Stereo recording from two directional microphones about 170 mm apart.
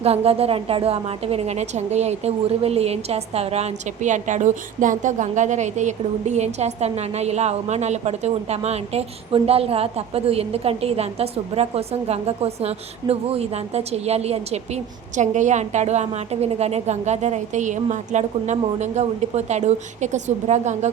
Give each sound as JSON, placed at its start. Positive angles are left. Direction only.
{"t": 0.0, "sound": "a woman's voice", "side_deg": -35}